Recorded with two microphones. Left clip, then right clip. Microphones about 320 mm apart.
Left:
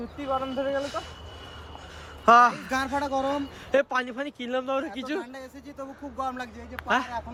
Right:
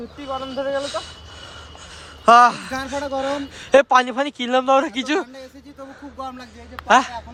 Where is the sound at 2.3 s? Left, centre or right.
Centre.